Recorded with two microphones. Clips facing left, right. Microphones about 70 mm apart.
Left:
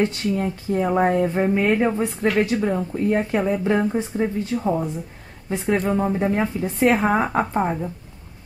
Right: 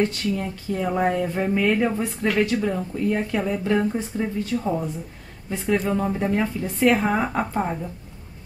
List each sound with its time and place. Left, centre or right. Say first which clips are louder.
0.0 s speech: left 2 dB; left
5.9 s speech: left 2 dB; centre